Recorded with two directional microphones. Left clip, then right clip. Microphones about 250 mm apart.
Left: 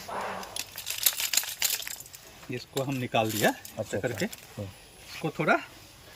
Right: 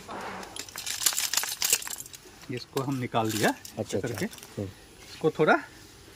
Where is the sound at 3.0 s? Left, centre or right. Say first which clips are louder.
Left 1 dB; centre.